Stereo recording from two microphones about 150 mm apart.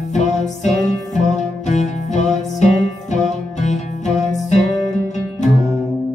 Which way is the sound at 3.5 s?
50° left (ahead or behind).